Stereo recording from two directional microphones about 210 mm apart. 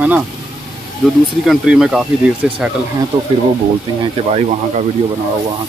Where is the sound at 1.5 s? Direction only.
Centre (ahead or behind).